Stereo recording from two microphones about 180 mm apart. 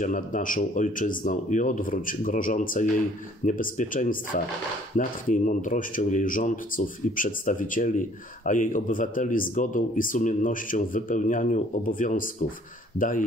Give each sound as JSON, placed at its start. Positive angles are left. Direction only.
{"t": 0.0, "sound": "speech", "side_deg": 45}